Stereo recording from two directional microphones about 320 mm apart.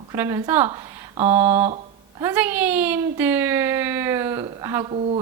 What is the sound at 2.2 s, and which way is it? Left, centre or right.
Speech, centre.